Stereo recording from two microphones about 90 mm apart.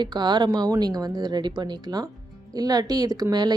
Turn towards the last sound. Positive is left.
turn(degrees=-50)  # may be behind; listen again after turning